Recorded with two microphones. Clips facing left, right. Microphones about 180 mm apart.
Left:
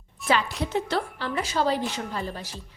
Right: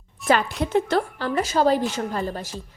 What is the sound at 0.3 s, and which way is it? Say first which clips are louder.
A woman's voice: right 4 dB; 45° right (ahead or behind).